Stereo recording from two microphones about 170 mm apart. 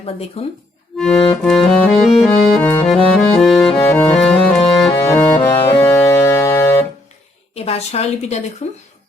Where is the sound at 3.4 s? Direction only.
Centre (ahead or behind).